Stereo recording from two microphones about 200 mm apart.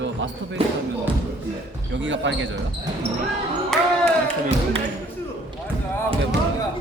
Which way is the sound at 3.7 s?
Centre (ahead or behind).